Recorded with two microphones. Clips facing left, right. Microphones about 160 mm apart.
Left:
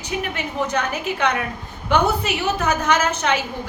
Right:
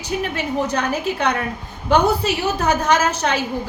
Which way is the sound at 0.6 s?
35° right (ahead or behind).